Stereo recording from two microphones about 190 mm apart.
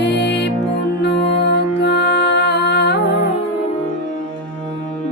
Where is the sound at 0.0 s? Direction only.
65° left (ahead or behind).